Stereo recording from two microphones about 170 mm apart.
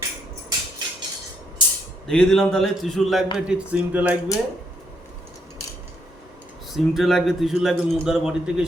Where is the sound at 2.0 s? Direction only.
5° left (ahead or behind).